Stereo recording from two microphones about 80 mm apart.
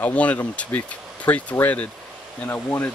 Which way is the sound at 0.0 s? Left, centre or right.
Centre.